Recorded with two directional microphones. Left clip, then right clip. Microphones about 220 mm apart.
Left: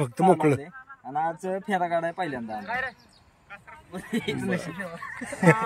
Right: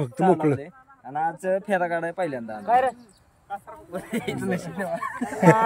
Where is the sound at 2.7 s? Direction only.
35° right (ahead or behind).